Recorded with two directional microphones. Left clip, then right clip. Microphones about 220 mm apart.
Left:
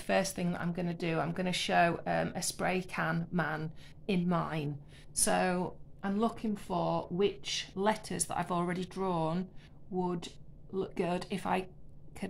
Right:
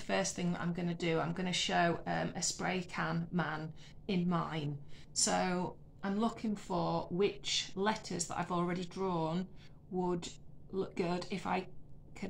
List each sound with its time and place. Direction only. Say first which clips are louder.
0.0 s speech: left 4 dB; 45° left (ahead or behind)